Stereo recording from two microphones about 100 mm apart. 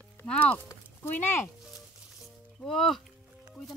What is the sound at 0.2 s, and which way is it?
Speech, 15° left (ahead or behind).